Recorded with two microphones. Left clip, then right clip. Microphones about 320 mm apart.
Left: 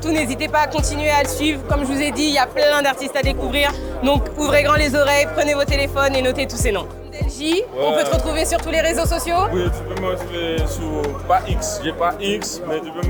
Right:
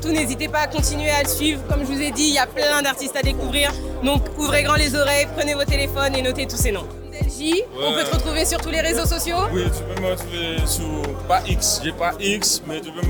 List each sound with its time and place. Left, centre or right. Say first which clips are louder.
0.0 s speech: left 2 dB; centre
10.0 s speech: left 1 dB; right